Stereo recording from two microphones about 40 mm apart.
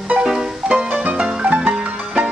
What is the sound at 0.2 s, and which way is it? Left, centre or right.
Music, centre.